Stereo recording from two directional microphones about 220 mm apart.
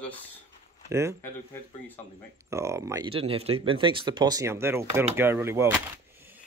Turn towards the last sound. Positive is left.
turn(degrees=-10)  # may be behind; listen again after turning